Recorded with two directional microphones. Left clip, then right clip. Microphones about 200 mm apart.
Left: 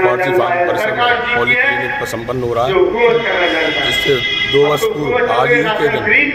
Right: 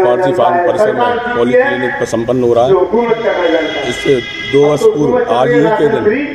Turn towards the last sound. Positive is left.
turn(degrees=-10)  # may be behind; listen again after turning